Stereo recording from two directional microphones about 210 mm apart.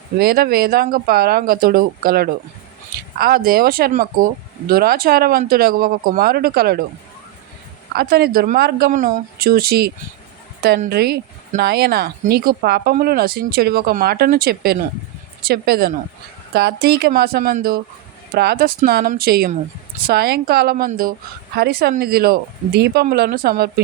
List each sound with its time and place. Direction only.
0.2 s speech: 45° right (ahead or behind)
7.9 s speech: 50° right (ahead or behind)